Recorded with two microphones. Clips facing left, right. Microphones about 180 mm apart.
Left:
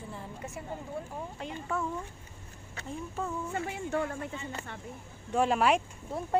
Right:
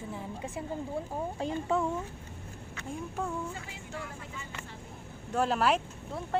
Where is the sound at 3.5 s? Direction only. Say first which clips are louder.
Left 10 dB; 60° left (ahead or behind).